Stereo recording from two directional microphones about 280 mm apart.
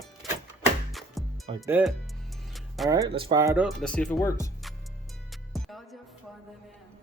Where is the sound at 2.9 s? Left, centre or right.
Centre.